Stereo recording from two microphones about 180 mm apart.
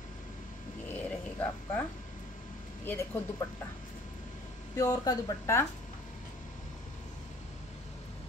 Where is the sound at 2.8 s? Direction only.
10° left (ahead or behind).